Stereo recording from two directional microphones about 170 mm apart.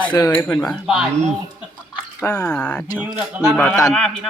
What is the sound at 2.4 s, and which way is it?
Speech, 5° left (ahead or behind).